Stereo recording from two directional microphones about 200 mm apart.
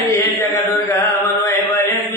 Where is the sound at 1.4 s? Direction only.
10° left (ahead or behind).